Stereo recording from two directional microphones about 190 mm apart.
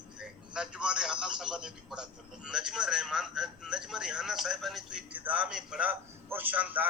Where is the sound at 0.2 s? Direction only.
5° right (ahead or behind).